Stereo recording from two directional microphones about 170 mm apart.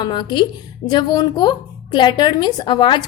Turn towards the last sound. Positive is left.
turn(degrees=25)  # may be behind; listen again after turning